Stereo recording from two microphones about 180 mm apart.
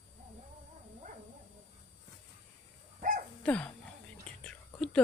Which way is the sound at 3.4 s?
5° left (ahead or behind).